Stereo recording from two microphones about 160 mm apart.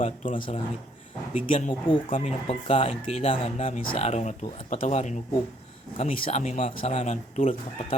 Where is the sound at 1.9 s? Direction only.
35° left (ahead or behind).